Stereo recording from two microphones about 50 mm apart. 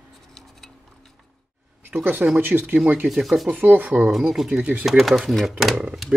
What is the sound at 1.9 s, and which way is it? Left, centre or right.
Speech, right.